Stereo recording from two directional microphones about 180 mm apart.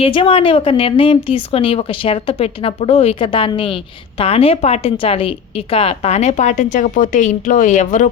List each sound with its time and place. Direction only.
0.0 s a woman's voice: 30° left (ahead or behind)